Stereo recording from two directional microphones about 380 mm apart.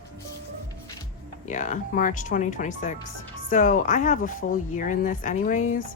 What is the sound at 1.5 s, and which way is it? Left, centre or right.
Speech, centre.